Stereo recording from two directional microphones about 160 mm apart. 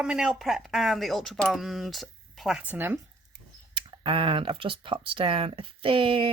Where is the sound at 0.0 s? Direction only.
5° right (ahead or behind).